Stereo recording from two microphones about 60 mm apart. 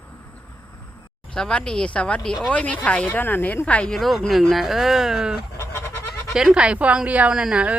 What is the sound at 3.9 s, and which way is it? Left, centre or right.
Speech, centre.